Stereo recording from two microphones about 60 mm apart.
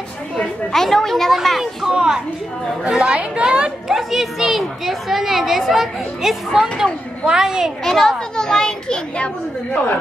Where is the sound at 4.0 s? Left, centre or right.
Centre.